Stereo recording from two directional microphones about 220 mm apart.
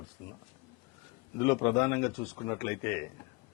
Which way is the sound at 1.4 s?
10° left (ahead or behind).